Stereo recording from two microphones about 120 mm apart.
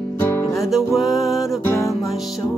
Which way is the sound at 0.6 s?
Centre (ahead or behind).